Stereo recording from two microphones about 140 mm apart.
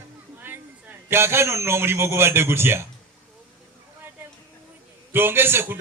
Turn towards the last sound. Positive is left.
turn(degrees=-15)  # may be behind; listen again after turning